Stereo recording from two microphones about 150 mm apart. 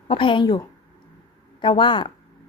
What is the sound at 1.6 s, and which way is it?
Speech, 35° left (ahead or behind).